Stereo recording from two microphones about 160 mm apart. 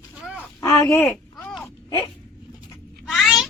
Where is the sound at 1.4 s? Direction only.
5° left (ahead or behind).